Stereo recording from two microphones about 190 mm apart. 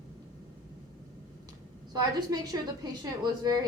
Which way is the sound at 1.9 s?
20° right (ahead or behind).